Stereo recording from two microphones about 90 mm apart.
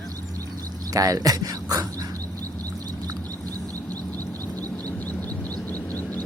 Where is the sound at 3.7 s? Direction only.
15° left (ahead or behind).